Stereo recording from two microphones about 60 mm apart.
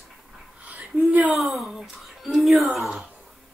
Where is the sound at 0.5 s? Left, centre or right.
Right.